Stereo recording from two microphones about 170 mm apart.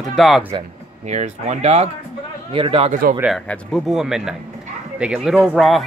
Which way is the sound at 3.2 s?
5° left (ahead or behind).